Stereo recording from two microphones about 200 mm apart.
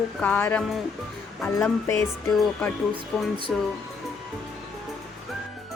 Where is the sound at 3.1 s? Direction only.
5° left (ahead or behind).